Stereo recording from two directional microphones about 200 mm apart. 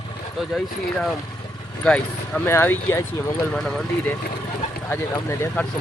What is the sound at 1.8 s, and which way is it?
Speech, 5° left (ahead or behind).